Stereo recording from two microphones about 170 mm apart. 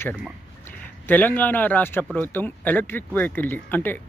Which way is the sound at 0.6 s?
10° left (ahead or behind).